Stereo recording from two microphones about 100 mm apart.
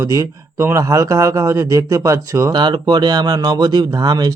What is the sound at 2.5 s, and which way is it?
Speech, 50° right (ahead or behind).